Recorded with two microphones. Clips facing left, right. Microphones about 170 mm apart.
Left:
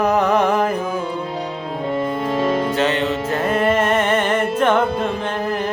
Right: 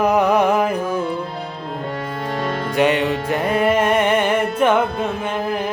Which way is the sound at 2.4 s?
20° left (ahead or behind).